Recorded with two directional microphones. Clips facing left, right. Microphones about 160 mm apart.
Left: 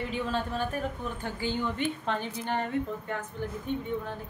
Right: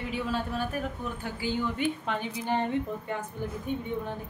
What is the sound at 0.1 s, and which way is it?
A woman's voice, 10° right (ahead or behind).